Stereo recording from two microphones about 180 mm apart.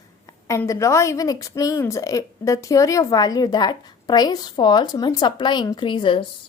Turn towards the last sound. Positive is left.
turn(degrees=30)  # may be behind; listen again after turning